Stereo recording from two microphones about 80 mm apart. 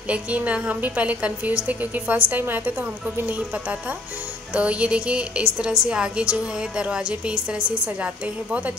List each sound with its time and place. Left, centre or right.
0.1 s a woman's voice: centre
4.6 s a woman's voice: centre